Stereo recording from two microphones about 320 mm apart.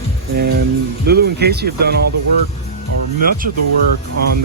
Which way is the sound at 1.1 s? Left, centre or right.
Right.